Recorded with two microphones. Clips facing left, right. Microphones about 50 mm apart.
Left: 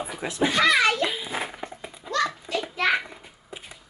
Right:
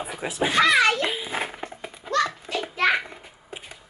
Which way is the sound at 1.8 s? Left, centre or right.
Right.